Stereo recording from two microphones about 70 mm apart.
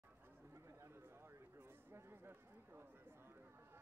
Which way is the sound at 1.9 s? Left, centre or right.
Right.